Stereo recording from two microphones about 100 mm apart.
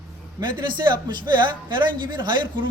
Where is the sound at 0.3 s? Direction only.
50° right (ahead or behind).